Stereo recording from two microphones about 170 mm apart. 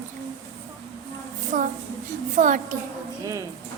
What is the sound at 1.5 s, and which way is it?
A woman's voice, 50° right (ahead or behind).